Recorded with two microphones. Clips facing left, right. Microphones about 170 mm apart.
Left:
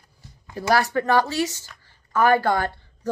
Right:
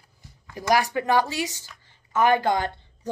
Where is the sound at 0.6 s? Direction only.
15° right (ahead or behind).